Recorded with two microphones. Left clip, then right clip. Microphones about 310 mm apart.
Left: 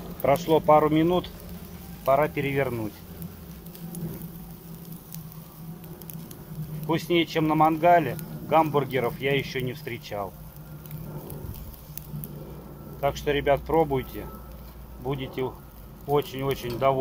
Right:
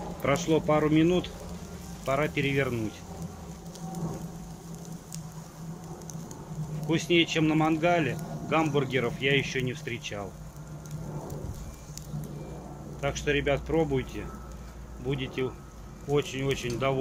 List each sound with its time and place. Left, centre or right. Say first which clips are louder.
0.2 s a man's voice: left 5 dB; centre
2.0 s speech: left 5 dB; centre
6.9 s a man's voice: even; centre
13.0 s a man's voice: left 3 dB; centre